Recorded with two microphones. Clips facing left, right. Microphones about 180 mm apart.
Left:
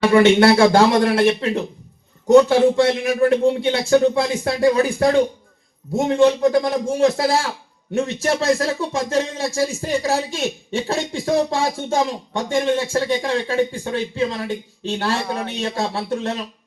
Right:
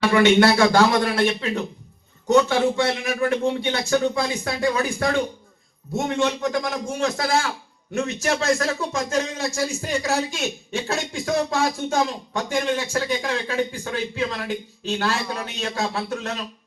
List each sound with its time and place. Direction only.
0.1 s a man's voice: 30° left (ahead or behind)